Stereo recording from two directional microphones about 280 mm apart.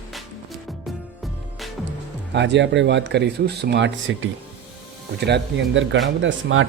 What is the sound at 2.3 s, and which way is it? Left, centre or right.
Speech, right.